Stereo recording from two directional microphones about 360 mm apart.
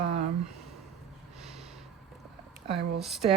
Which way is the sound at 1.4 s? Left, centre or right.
Centre.